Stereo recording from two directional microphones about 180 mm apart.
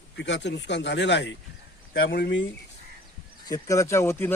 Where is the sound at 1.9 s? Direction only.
55° left (ahead or behind); by 2.4 s 75° left (ahead or behind).